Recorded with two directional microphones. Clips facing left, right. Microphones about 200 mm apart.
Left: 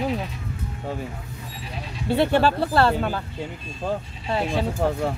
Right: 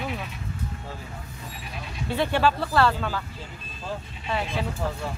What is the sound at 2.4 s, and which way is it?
Speech, 30° left (ahead or behind).